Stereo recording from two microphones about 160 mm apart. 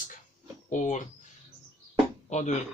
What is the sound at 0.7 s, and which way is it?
Speech, 50° left (ahead or behind).